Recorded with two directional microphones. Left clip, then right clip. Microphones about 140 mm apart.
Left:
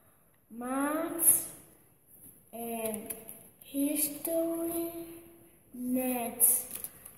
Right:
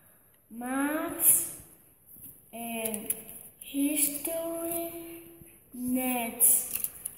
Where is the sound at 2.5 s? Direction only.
15° left (ahead or behind).